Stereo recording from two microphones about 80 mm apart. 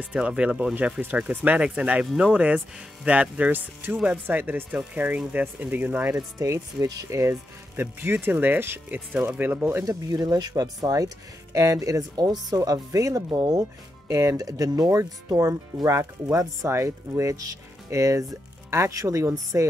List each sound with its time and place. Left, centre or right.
0.0 s speech: centre
4.4 s speech: right
6.4 s speech: right
9.8 s speech: right